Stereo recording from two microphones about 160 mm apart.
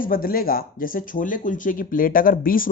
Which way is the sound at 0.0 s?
60° left (ahead or behind).